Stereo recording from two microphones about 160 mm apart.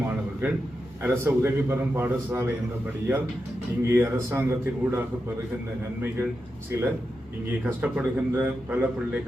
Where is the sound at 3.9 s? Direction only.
15° right (ahead or behind).